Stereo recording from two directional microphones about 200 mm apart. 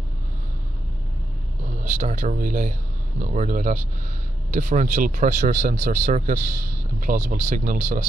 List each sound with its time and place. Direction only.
1.9 s speech: 40° right (ahead or behind)